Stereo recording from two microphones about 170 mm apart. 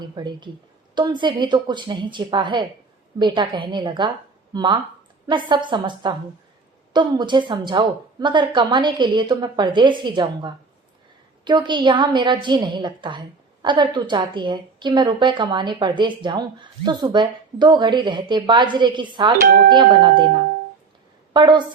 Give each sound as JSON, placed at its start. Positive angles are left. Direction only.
{"t": 0.0, "sound": "a woman's voice", "side_deg": -25}
{"t": 19.4, "sound": "speech", "side_deg": -55}
{"t": 19.7, "sound": "a woman's voice", "side_deg": -30}
{"t": 21.3, "sound": "a woman's voice", "side_deg": -25}